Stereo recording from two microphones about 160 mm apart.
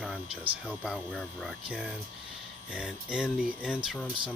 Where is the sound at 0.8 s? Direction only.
5° left (ahead or behind).